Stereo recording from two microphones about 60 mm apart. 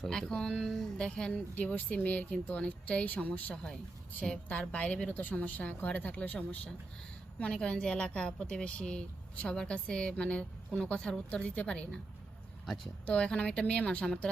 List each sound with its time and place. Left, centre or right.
0.0 s a woman's voice: centre
1.5 s a woman's voice: left
3.5 s a woman's voice: centre
12.6 s speech: centre
13.1 s a woman's voice: centre